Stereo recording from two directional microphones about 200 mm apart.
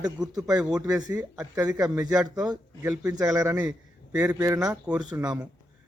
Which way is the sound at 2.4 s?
20° right (ahead or behind).